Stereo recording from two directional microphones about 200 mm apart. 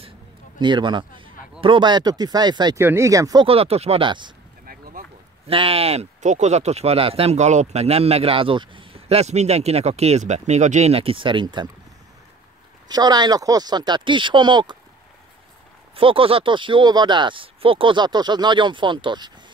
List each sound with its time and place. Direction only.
0.6 s speech: 25° right (ahead or behind)
4.6 s a sound: 45° right (ahead or behind)
5.5 s speech: 30° right (ahead or behind)
12.8 s speech: 20° right (ahead or behind)
16.0 s speech: 25° right (ahead or behind)